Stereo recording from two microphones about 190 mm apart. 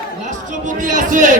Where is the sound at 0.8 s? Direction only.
45° right (ahead or behind).